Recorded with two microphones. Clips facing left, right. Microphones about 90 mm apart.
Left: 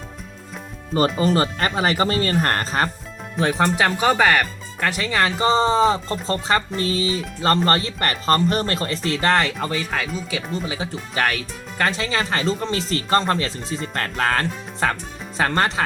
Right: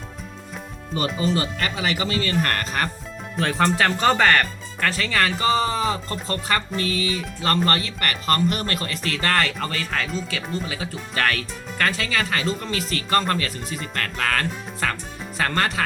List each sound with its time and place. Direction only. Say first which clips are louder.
0.9 s speech: left 5 dB; 45° left (ahead or behind)
3.3 s speech: left 1 dB; 15° left (ahead or behind)